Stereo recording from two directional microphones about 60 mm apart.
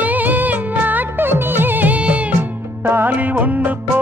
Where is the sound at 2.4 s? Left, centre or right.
Right.